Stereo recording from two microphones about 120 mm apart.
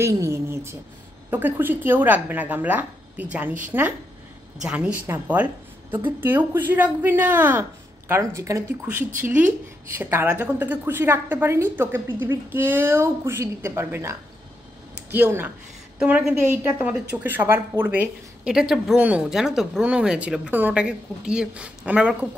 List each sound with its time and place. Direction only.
0.0 s speech: 20° right (ahead or behind)
4.6 s speech: 10° right (ahead or behind)
8.1 s a woman's voice: 25° right (ahead or behind)
8.8 s a woman's voice: 15° right (ahead or behind)
18.5 s speech: 5° right (ahead or behind)